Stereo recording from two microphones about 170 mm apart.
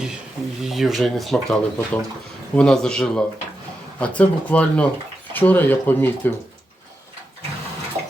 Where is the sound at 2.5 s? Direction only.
5° left (ahead or behind).